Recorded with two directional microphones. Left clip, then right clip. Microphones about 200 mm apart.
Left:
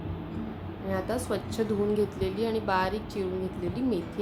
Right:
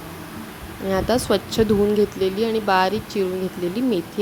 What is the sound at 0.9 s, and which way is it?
Speech, 45° right (ahead or behind).